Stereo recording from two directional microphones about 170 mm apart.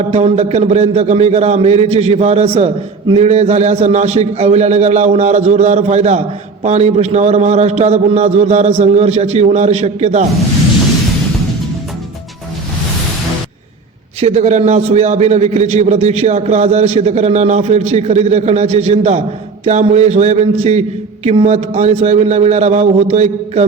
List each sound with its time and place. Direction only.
0.0 s a man's voice: 35° right (ahead or behind)
14.2 s a man's voice: 40° right (ahead or behind)